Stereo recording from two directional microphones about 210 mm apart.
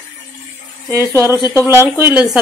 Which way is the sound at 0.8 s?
15° right (ahead or behind).